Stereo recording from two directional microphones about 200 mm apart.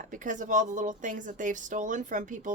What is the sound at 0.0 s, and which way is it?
Speech, 40° right (ahead or behind).